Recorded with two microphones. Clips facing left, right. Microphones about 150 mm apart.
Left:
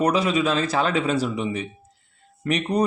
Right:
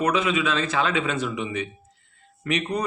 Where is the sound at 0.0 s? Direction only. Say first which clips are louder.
Left 2 dB; 35° left (ahead or behind).